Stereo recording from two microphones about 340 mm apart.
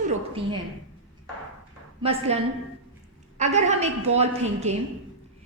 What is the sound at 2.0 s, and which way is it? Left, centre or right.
A woman's voice, centre.